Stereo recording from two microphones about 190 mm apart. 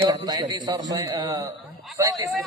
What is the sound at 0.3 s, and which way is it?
A man's voice, 20° right (ahead or behind).